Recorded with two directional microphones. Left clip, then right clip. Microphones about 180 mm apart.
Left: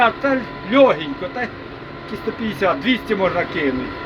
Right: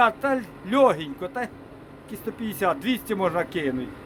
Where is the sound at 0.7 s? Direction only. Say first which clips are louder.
Left 6 dB; 35° right (ahead or behind).